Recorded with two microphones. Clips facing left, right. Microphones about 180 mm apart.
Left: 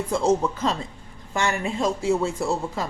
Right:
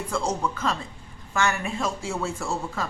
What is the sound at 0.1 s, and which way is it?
Speech, 20° left (ahead or behind).